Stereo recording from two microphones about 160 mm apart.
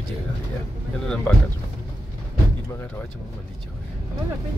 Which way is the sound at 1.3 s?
10° left (ahead or behind).